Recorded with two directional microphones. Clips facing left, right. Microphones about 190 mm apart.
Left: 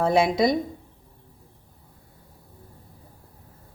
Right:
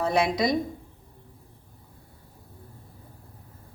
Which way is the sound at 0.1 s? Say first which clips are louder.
Left 3 dB; 25° left (ahead or behind).